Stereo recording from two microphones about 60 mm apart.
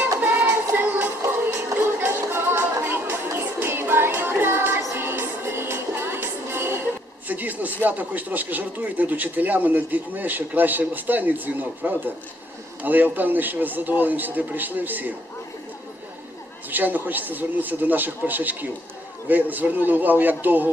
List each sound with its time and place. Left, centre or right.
0.2 s child singing: right
2.0 s music: right
7.3 s a man's voice: right
16.6 s a man's voice: right